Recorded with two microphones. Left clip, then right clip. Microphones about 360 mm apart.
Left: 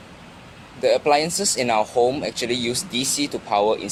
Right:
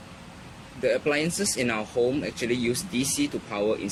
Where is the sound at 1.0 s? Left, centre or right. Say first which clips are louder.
Left 7 dB; centre.